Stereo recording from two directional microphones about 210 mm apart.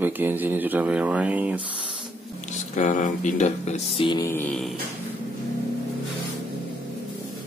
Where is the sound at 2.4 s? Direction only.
35° left (ahead or behind); by 4.7 s 5° left (ahead or behind).